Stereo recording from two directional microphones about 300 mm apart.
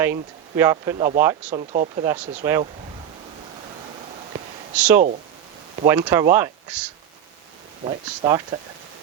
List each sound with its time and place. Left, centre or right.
0.0 s speech: centre
1.5 s speech: right
2.3 s speech: centre
4.7 s speech: centre
7.9 s speech: centre